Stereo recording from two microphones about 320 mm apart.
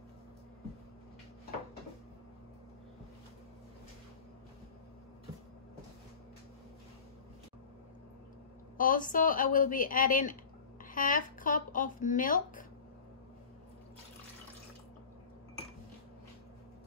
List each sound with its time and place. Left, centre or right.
8.7 s a woman's voice: left